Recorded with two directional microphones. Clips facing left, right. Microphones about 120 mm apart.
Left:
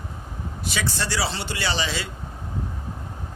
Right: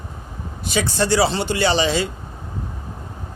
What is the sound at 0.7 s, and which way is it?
A man's voice, 20° right (ahead or behind).